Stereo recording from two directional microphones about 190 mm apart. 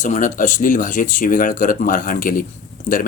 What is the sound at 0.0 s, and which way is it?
Speech, 40° left (ahead or behind).